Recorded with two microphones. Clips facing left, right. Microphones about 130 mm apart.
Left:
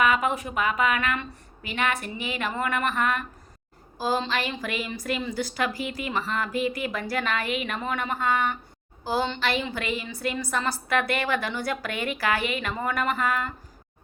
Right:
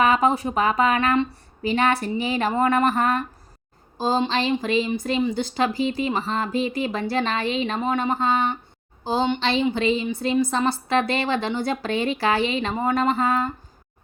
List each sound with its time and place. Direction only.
0.0 s speech: 35° right (ahead or behind)
3.9 s a woman's voice: 25° right (ahead or behind)